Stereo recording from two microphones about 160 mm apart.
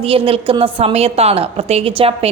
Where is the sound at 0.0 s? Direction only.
35° right (ahead or behind).